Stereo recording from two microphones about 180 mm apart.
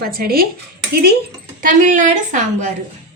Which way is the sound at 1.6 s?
45° right (ahead or behind).